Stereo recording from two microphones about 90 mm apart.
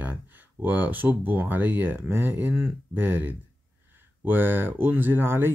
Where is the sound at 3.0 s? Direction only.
20° right (ahead or behind).